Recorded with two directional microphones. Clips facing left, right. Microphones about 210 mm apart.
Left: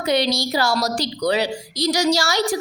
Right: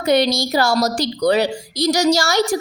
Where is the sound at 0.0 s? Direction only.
50° right (ahead or behind).